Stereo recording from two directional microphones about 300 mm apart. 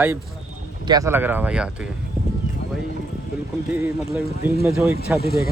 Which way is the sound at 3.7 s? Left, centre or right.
Centre.